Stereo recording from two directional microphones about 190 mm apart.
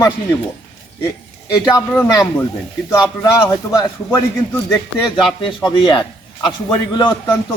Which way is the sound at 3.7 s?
15° left (ahead or behind).